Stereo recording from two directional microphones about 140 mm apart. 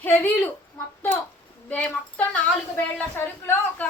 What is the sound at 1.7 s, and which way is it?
A woman's voice, 10° left (ahead or behind).